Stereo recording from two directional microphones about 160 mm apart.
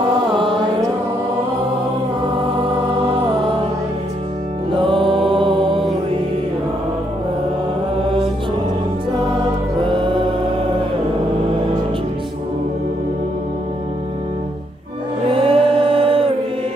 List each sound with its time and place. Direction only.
4.7 s music: 30° right (ahead or behind)
9.8 s music: 30° right (ahead or behind)
15.3 s music: 35° right (ahead or behind)